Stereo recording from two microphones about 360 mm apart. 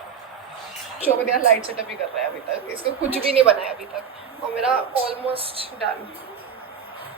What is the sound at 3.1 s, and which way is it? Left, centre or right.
Speech, centre.